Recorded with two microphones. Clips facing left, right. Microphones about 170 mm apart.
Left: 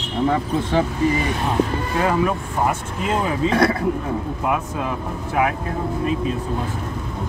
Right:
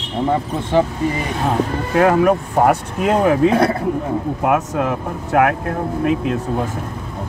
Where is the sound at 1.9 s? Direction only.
70° right (ahead or behind).